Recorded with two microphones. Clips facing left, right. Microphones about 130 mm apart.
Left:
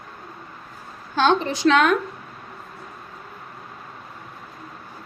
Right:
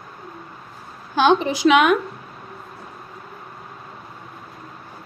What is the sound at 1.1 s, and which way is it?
Speech, 10° right (ahead or behind).